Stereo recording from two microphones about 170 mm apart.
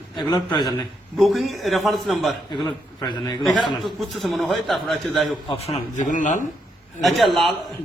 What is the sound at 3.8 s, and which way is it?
A man's voice, centre (ahead or behind).